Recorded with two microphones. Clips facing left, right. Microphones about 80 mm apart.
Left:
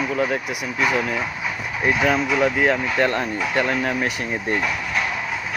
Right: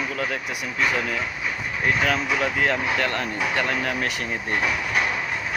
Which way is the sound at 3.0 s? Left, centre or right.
Centre.